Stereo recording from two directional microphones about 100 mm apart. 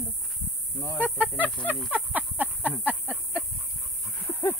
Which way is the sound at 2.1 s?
15° right (ahead or behind).